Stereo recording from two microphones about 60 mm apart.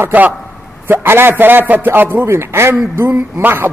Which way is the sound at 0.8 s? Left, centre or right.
Right.